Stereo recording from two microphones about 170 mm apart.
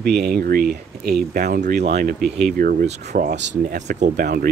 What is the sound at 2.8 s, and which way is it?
Speech, 40° right (ahead or behind).